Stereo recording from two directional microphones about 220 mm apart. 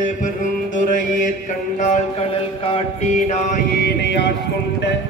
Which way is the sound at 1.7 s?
30° left (ahead or behind).